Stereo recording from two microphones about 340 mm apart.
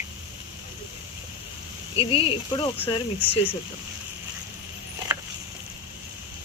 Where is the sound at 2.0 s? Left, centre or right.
Centre.